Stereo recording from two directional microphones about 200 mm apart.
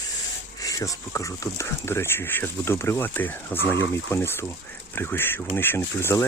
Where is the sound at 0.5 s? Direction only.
15° left (ahead or behind).